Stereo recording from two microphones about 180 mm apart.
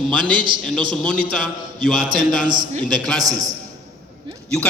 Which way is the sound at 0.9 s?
5° left (ahead or behind).